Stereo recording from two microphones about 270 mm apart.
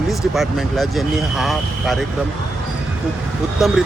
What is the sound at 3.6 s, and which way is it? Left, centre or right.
Speech, centre.